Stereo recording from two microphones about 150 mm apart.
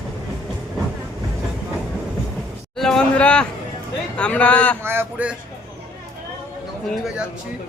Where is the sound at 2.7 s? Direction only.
5° left (ahead or behind).